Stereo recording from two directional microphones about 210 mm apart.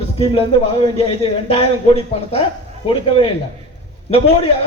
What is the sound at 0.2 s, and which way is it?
Speech, 25° left (ahead or behind).